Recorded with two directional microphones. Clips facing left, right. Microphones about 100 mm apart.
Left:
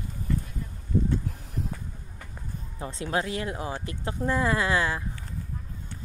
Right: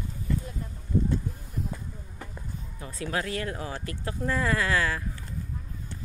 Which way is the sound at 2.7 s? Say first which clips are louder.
Left 3 dB; 25° left (ahead or behind).